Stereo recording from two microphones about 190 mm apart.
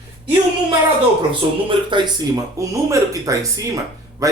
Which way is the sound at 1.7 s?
25° right (ahead or behind).